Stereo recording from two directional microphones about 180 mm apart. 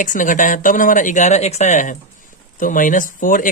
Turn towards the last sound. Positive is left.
turn(degrees=50)  # may be behind; listen again after turning